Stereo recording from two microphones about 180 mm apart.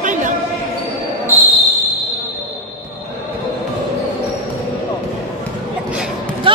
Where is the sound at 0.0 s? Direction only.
45° right (ahead or behind).